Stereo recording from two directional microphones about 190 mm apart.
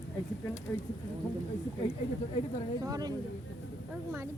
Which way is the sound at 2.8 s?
20° right (ahead or behind).